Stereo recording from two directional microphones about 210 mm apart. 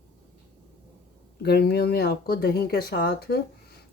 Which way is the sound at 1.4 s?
50° left (ahead or behind).